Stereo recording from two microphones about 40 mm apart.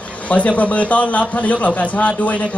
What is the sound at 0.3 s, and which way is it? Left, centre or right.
A man's voice, left.